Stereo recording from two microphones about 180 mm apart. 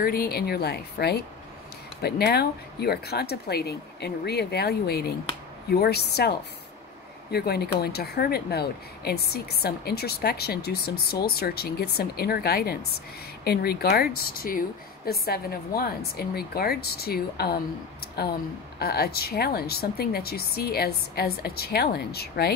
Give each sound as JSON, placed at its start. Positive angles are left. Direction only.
{"t": 0.0, "sound": "speech", "side_deg": 55}
{"t": 18.8, "sound": "speech", "side_deg": 60}